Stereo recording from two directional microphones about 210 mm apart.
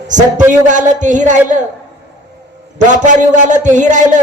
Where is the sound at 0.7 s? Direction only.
35° right (ahead or behind).